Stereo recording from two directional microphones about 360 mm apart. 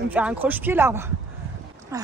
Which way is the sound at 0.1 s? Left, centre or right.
Centre.